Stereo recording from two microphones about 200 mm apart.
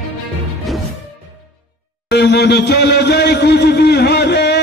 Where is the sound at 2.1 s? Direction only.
55° left (ahead or behind).